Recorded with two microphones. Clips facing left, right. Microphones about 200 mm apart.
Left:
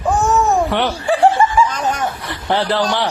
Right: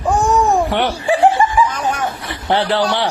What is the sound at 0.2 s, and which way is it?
Giggle, 15° right (ahead or behind).